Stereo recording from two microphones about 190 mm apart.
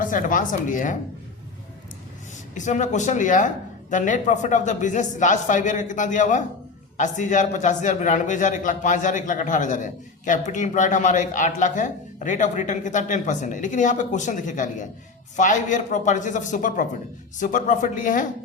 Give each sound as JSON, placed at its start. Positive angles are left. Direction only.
{"t": 0.0, "sound": "speech", "side_deg": 45}
{"t": 2.6, "sound": "a man's voice", "side_deg": 40}